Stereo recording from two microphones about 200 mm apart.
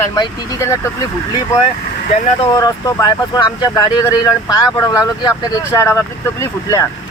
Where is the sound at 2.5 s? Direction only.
15° left (ahead or behind).